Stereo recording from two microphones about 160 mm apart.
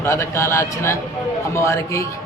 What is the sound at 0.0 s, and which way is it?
A man's voice, 15° left (ahead or behind).